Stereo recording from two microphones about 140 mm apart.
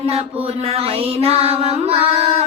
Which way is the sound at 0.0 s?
45° right (ahead or behind).